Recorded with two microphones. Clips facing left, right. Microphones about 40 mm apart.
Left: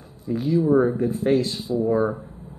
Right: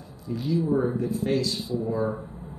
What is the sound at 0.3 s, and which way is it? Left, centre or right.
Speech, left.